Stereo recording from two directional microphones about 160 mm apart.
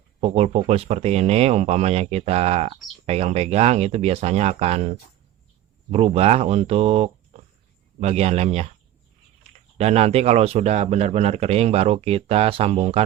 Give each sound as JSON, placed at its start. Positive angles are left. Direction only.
{"t": 0.2, "sound": "speech", "side_deg": -40}
{"t": 5.9, "sound": "speech", "side_deg": -40}